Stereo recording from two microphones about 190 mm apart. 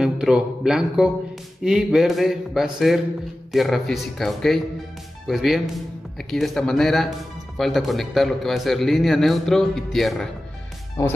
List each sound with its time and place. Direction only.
0.0 s a man's voice: 5° right (ahead or behind)